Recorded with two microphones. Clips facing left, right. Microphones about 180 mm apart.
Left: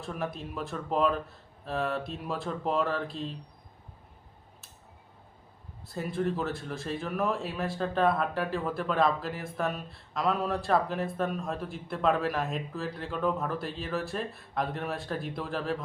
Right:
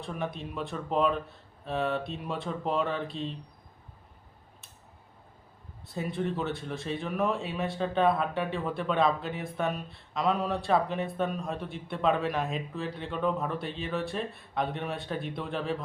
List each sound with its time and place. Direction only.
0.0 s speech: centre (ahead or behind)
5.9 s speech: centre (ahead or behind)